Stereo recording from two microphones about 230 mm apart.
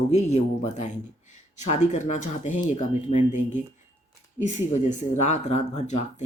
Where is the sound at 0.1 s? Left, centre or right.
Left.